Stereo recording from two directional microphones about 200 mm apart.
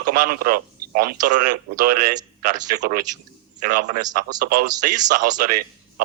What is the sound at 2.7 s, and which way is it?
A man's voice, 40° right (ahead or behind).